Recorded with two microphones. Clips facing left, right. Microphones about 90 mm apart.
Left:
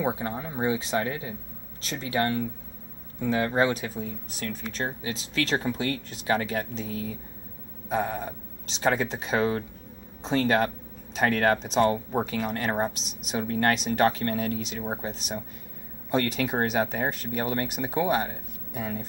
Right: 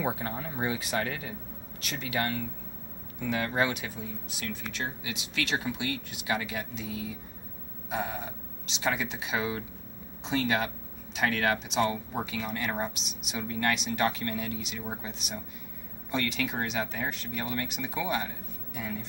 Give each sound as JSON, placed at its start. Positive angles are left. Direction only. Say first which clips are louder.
{"t": 0.0, "sound": "speech", "louder": "left 3 dB", "side_deg": 20}
{"t": 7.9, "sound": "speech", "louder": "left 5 dB", "side_deg": 40}